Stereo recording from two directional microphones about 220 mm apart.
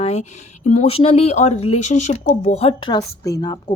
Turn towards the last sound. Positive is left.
turn(degrees=15)  # may be behind; listen again after turning